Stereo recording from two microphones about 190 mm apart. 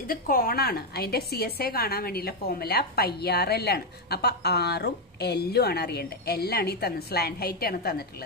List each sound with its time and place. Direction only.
0.0 s a woman's voice: 50° left (ahead or behind)